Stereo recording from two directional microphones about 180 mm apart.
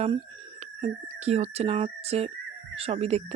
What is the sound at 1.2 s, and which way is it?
Speech, 35° right (ahead or behind).